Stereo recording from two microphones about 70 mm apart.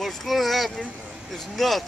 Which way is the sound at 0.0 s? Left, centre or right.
Centre.